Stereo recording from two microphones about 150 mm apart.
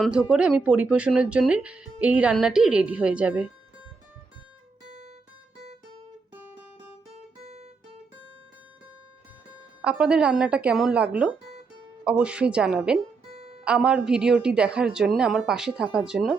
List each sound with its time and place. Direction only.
0.0 s speech: 5° right (ahead or behind)
4.8 s guitar: 50° right (ahead or behind)
7.4 s guitar: 45° right (ahead or behind)
9.8 s speech: 5° right (ahead or behind)
13.3 s music: 40° right (ahead or behind)
13.7 s a woman's voice: 5° right (ahead or behind)